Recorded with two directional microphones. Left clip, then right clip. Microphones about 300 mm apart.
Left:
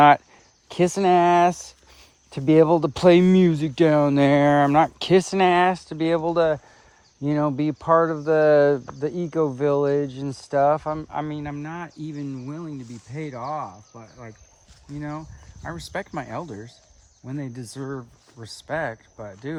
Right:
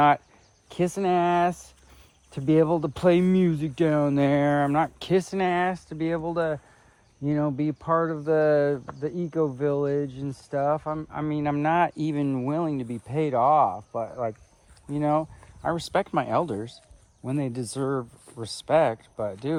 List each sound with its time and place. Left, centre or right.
0.7 s speech: left
11.1 s speech: centre
11.5 s speech: centre
17.7 s speech: centre